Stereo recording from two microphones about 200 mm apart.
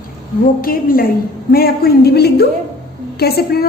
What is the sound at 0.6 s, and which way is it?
A woman's voice, 45° left (ahead or behind).